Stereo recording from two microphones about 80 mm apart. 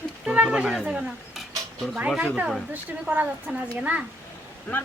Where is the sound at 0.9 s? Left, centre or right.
Centre.